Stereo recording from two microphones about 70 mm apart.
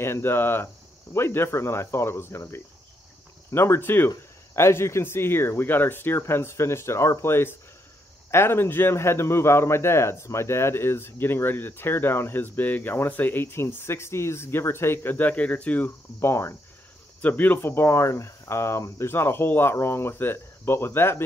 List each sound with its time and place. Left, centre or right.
0.0 s a man's voice: left
16.2 s a man's voice: left
17.2 s speech: left
17.6 s a man's voice: left